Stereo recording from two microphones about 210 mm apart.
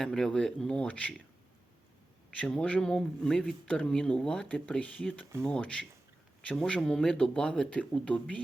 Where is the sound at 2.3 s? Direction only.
5° left (ahead or behind).